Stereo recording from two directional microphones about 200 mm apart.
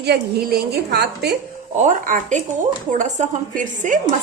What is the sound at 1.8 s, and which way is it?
A woman's voice, 40° right (ahead or behind).